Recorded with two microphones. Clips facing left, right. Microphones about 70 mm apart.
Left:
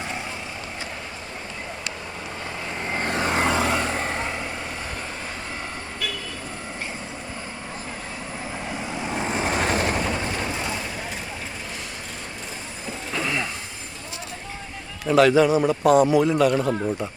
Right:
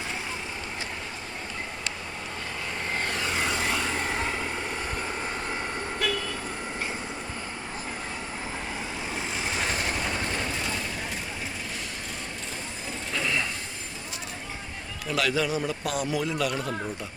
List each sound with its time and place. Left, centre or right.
2.9 s vehicle: left
3.5 s vehicle: left
9.0 s vehicle: left
10.0 s a sound: centre
13.2 s a sound: centre
15.0 s a man's voice: left